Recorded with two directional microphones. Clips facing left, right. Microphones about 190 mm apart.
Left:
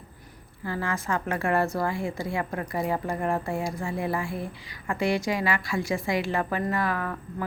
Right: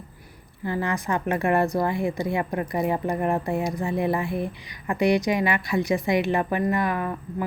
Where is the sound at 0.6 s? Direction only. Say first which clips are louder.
Right 4 dB; 20° right (ahead or behind).